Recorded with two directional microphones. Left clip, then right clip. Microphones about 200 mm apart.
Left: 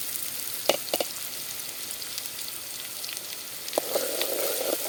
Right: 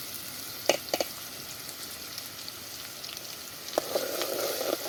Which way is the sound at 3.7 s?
20° left (ahead or behind).